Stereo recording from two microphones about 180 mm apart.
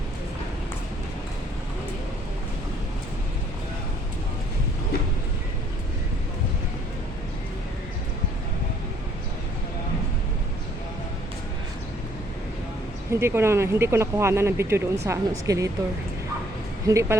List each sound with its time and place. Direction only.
13.1 s speech: 15° right (ahead or behind)
16.9 s speech: 15° right (ahead or behind)